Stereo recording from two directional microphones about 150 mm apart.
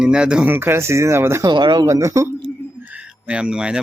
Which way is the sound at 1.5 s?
30° right (ahead or behind).